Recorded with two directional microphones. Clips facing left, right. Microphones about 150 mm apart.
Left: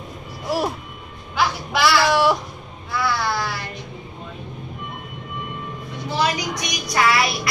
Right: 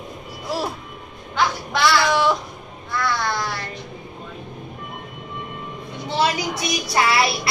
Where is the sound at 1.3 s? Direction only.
5° left (ahead or behind).